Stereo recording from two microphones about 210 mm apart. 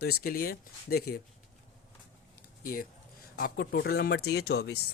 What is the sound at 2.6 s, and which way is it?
Speech, 45° left (ahead or behind).